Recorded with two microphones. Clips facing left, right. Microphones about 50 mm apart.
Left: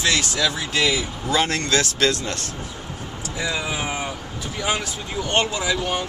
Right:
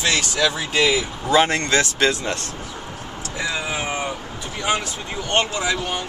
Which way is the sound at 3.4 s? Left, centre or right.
Centre.